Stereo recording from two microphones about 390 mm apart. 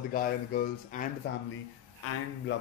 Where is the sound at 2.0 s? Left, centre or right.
Left.